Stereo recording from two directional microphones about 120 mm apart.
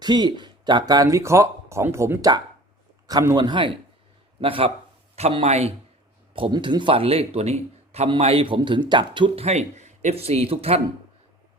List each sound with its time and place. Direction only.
0.0 s speech: 35° right (ahead or behind)
3.1 s speech: 35° right (ahead or behind); by 4.7 s 50° right (ahead or behind)
5.1 s speech: 60° right (ahead or behind)
6.3 s a man's voice: 45° right (ahead or behind); by 8.1 s 60° right (ahead or behind)
8.2 s speech: 50° right (ahead or behind)